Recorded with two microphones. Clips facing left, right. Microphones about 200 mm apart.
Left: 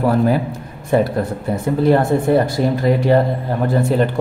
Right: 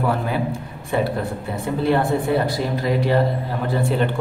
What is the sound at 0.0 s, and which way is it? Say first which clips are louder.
A man's voice: left 6 dB; 40° left (ahead or behind).